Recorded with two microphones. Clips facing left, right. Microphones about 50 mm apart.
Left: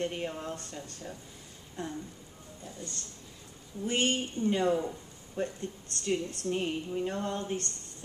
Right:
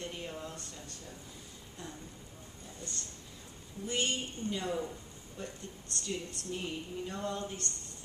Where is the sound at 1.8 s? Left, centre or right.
Left.